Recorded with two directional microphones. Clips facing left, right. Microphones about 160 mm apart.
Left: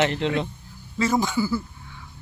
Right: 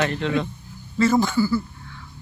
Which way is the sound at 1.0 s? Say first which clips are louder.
Right 4 dB; 10° left (ahead or behind).